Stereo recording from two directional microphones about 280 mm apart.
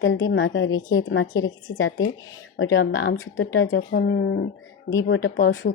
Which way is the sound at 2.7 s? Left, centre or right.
Left.